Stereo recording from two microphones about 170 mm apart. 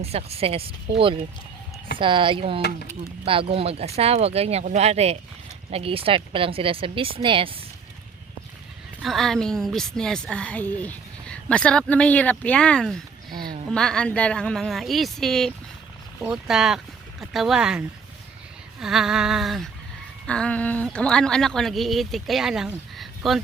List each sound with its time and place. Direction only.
0.0 s speech: 35° right (ahead or behind)
2.6 s speech: 75° left (ahead or behind)
3.2 s speech: 30° right (ahead or behind)
9.0 s a woman's voice: centre (ahead or behind)